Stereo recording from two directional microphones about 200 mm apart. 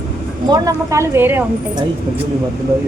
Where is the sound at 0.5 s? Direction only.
20° right (ahead or behind).